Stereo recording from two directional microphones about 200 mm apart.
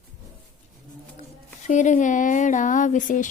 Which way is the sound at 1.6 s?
40° left (ahead or behind).